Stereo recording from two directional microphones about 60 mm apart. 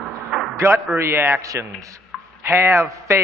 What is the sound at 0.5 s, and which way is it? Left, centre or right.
Speech, right.